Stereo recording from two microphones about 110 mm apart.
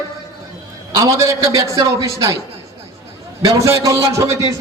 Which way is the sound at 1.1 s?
30° right (ahead or behind).